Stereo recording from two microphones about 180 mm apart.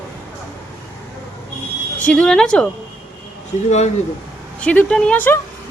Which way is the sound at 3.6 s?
40° left (ahead or behind).